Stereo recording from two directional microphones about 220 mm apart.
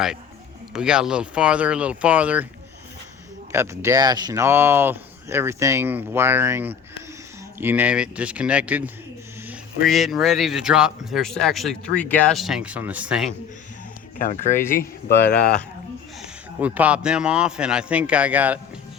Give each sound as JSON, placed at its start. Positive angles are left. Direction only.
{"t": 0.7, "sound": "speech", "side_deg": -5}
{"t": 3.5, "sound": "speech", "side_deg": -10}
{"t": 14.2, "sound": "speech", "side_deg": 35}
{"t": 14.8, "sound": "speech", "side_deg": 45}
{"t": 16.2, "sound": "speech", "side_deg": -5}